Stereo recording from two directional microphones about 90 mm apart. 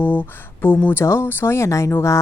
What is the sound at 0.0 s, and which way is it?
Speech, 20° left (ahead or behind).